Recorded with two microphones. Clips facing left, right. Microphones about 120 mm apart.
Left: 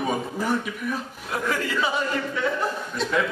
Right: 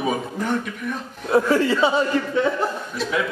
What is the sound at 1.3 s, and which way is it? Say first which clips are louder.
A man's voice: right 9 dB; 30° right (ahead or behind).